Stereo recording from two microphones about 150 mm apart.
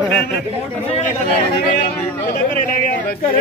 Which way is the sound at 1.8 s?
80° left.